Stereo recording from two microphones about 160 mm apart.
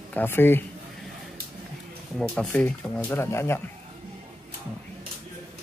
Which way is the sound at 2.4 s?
10° left (ahead or behind).